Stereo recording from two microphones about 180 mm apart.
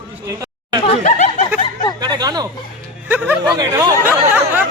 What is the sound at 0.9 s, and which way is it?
Speech, 40° left (ahead or behind).